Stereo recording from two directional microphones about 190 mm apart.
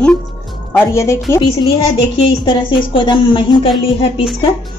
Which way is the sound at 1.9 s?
25° left (ahead or behind).